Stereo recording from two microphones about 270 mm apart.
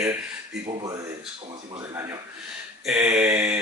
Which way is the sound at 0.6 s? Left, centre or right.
Centre.